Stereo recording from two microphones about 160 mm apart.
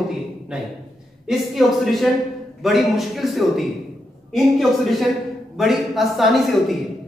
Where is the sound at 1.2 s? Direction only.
Centre (ahead or behind).